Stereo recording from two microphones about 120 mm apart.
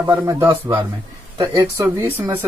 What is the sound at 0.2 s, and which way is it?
Speech, 25° right (ahead or behind).